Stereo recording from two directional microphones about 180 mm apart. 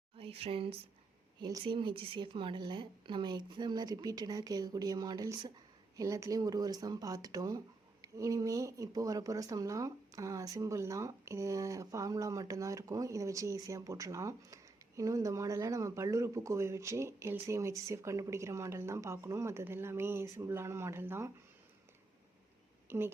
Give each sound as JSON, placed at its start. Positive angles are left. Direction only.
{"t": 0.2, "sound": "a woman's voice", "side_deg": -30}
{"t": 22.9, "sound": "speech", "side_deg": -10}